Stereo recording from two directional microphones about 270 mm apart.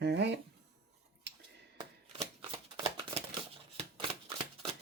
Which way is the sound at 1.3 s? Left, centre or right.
Right.